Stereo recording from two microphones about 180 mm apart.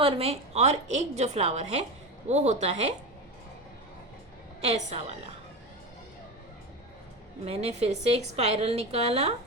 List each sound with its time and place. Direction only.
0.0 s a woman's voice: 35° right (ahead or behind)
4.6 s a woman's voice: 35° right (ahead or behind)
7.4 s a woman's voice: 35° right (ahead or behind)